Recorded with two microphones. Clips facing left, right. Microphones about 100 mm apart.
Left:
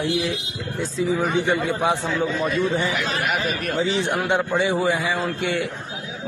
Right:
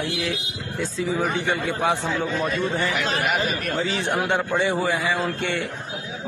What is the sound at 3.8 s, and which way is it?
A man's voice, 20° left (ahead or behind).